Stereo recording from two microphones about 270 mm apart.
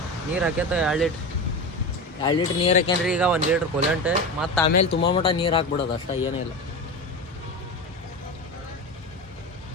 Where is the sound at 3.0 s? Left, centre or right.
Centre.